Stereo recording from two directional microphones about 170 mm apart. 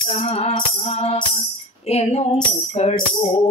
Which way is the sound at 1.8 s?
35° left (ahead or behind).